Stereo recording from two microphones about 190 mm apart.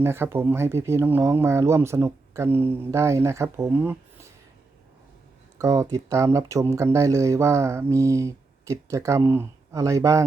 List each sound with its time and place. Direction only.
0.0 s speech: 15° right (ahead or behind)
5.5 s speech: 15° right (ahead or behind)